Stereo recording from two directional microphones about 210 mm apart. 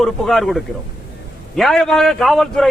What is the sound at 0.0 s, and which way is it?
A man's voice, centre (ahead or behind).